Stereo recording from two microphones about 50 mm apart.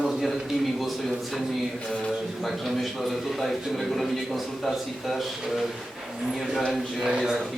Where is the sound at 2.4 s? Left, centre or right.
Centre.